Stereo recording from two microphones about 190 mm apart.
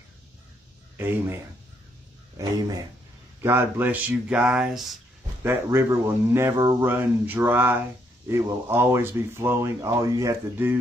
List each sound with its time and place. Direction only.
3.4 s speech: 10° right (ahead or behind)